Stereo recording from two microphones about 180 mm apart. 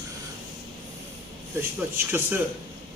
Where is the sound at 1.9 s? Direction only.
10° right (ahead or behind).